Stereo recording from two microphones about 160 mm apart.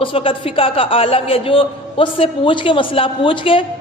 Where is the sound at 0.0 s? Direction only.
35° left (ahead or behind).